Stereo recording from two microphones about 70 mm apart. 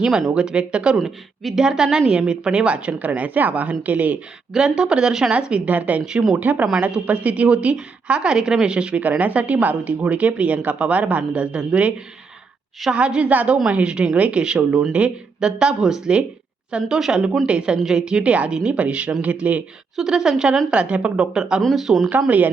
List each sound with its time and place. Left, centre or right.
0.0 s a woman's voice: centre
0.9 s a woman's voice: centre; by 4.2 s right
4.5 s a woman's voice: centre
20.0 s a woman's voice: centre
21.6 s speech: centre